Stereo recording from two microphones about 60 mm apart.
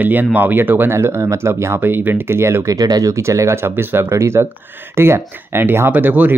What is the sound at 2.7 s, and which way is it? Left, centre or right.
Speech, right.